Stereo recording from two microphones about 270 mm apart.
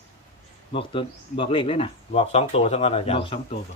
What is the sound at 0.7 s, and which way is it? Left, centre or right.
Speech, centre.